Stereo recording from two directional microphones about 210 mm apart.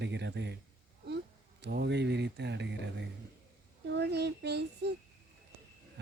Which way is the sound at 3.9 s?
55° right (ahead or behind).